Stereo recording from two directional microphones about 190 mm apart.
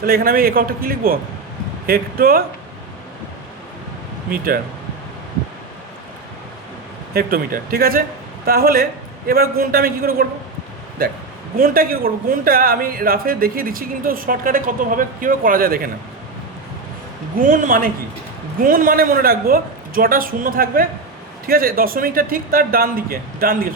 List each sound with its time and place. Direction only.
0.0 s speech: 50° right (ahead or behind)
4.3 s speech: 50° right (ahead or behind)
7.1 s speech: 50° right (ahead or behind)
11.5 s speech: 50° right (ahead or behind)
17.3 s speech: 45° right (ahead or behind)